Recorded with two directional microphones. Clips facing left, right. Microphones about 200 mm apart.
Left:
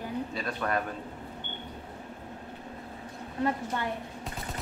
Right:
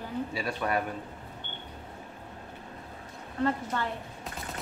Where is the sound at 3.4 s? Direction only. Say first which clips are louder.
Right 1 dB; 15° left (ahead or behind).